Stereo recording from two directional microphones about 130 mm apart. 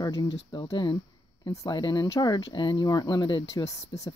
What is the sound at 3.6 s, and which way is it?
Speech, 25° left (ahead or behind).